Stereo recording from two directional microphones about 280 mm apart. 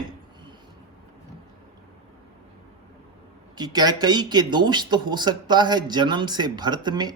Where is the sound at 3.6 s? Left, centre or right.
Centre.